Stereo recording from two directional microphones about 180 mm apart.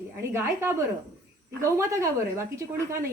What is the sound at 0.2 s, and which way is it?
A woman's voice, 15° right (ahead or behind).